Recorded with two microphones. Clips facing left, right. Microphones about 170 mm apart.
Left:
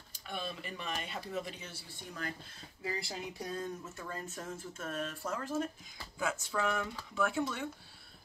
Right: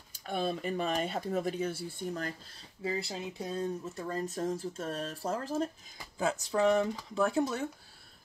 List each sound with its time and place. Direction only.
0.2 s speech: 45° right (ahead or behind)
2.8 s speech: 25° right (ahead or behind); by 7.7 s 40° right (ahead or behind)